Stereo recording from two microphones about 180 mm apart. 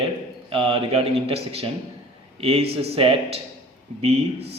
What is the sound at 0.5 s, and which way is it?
A man's voice, 35° right (ahead or behind).